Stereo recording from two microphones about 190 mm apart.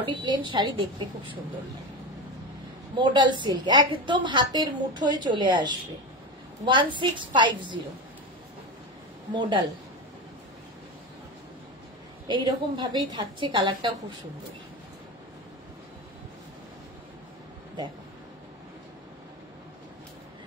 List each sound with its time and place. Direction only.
0.0 s a woman's voice: 25° right (ahead or behind)
3.0 s a woman's voice: 25° right (ahead or behind)
9.3 s a woman's voice: 25° right (ahead or behind)
12.3 s a woman's voice: 25° right (ahead or behind)